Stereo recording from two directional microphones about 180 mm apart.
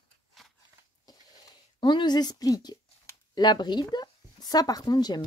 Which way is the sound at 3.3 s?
25° left (ahead or behind).